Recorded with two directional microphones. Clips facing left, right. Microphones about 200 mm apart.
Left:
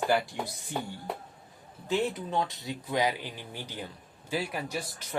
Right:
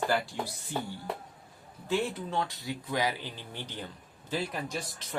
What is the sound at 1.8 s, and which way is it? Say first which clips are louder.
Speech: left 1 dB; 15° left (ahead or behind).